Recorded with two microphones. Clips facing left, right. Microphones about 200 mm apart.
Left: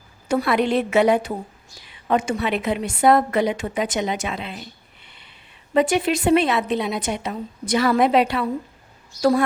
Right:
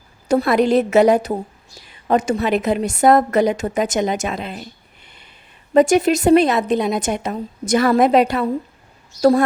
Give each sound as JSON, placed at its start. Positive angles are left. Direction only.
{"t": 0.3, "sound": "a woman's voice", "side_deg": -40}
{"t": 5.0, "sound": "a sound", "side_deg": -45}
{"t": 5.7, "sound": "a woman's voice", "side_deg": -45}